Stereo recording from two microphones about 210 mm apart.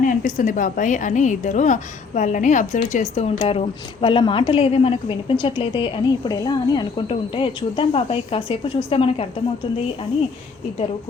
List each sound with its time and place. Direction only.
0.0 s a woman's voice: 40° left (ahead or behind)